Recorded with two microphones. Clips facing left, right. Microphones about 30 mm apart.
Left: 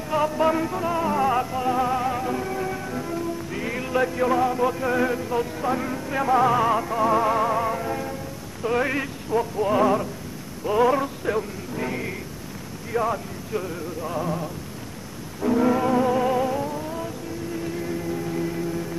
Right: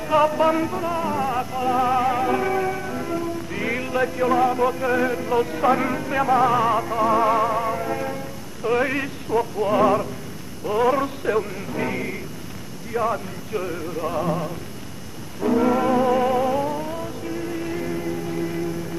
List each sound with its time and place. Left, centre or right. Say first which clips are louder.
0.0 s music: right 4 dB; centre
2.6 s music: right 3 dB; centre
3.8 s music: left 1 dB; centre
5.6 s speech: right 6 dB; right
6.0 s music: even; centre